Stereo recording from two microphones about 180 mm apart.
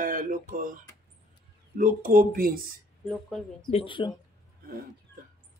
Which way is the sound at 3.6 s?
30° left (ahead or behind).